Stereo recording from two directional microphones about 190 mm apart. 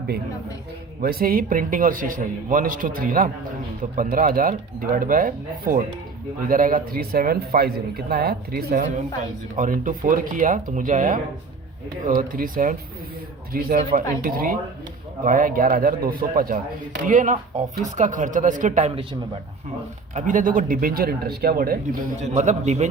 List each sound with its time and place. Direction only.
1.0 s speech: 50° right (ahead or behind)
9.6 s speech: 40° right (ahead or behind)
20.1 s speech: 45° right (ahead or behind)
22.2 s a man's voice: 35° right (ahead or behind)